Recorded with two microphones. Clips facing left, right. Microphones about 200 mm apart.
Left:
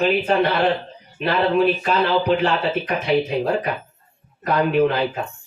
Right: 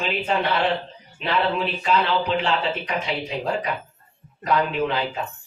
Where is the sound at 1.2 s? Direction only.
55° left (ahead or behind).